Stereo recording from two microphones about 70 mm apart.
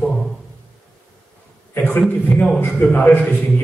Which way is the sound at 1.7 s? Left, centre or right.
Left.